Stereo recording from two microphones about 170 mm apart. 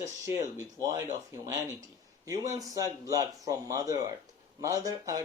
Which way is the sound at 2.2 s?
20° right (ahead or behind).